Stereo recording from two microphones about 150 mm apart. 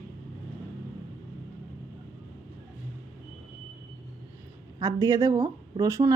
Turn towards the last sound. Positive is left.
turn(degrees=-20)  # may be behind; listen again after turning